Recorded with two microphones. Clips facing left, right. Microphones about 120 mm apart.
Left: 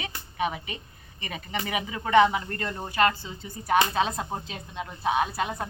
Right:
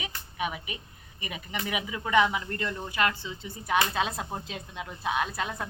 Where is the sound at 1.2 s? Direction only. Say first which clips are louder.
Left 2 dB; 10° right (ahead or behind).